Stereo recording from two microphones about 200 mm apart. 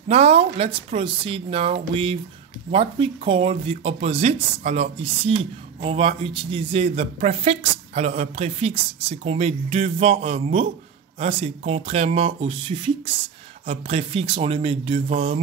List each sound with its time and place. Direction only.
0.1 s speech: 30° right (ahead or behind)